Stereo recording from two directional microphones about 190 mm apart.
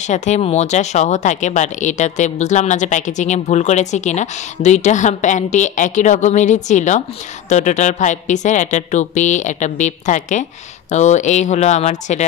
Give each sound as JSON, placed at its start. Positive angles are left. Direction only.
{"t": 0.0, "sound": "speech", "side_deg": 40}